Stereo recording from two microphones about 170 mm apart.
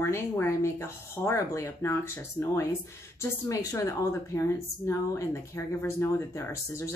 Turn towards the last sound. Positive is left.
turn(degrees=15)  # may be behind; listen again after turning